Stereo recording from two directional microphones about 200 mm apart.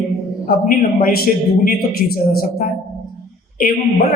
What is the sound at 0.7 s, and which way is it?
A man's voice, 45° left (ahead or behind).